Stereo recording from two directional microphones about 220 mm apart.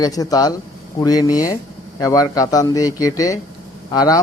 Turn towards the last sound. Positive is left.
turn(degrees=15)  # may be behind; listen again after turning